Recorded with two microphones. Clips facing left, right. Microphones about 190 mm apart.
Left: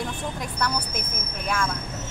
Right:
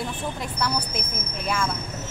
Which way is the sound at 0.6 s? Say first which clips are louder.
Right 1 dB; 10° right (ahead or behind).